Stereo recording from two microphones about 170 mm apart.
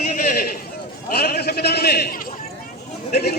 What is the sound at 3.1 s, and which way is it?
Chatter, 65° left (ahead or behind).